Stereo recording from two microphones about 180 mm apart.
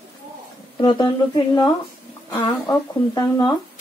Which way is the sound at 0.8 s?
25° left (ahead or behind).